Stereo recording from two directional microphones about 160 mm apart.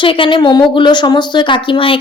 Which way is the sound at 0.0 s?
30° left (ahead or behind).